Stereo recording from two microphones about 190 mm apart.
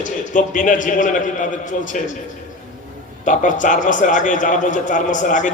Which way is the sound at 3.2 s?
45° left (ahead or behind).